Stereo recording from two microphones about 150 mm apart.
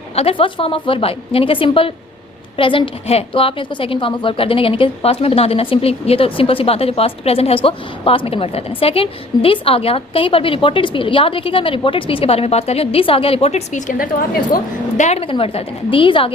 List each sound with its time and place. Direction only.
0.2 s a woman's voice: 35° left (ahead or behind)